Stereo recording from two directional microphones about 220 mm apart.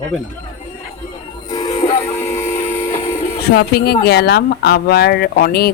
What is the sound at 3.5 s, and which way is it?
Speech, 45° left (ahead or behind).